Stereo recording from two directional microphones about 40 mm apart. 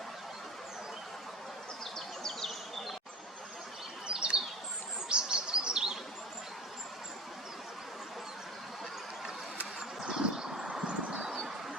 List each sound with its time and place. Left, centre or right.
1.8 s insect: centre
4.0 s bird: right
10.1 s a sound: centre